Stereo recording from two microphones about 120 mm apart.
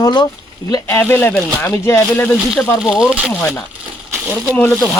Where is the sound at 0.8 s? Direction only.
15° left (ahead or behind).